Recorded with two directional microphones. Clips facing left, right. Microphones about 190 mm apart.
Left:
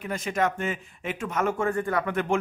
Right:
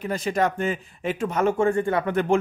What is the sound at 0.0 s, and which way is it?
A man's voice, 35° right (ahead or behind).